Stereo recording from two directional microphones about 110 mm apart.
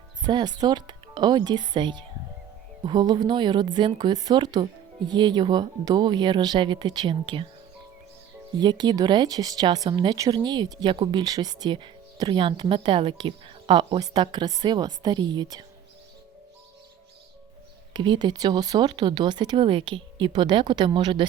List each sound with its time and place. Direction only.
0.2 s speech: 40° right (ahead or behind)
8.5 s speech: 40° right (ahead or behind)
12.4 s speech: 50° right (ahead or behind)
17.9 s speech: 45° right (ahead or behind)